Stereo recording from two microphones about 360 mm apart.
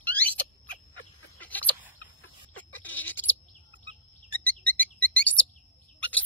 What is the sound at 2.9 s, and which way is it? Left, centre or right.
Goat, centre.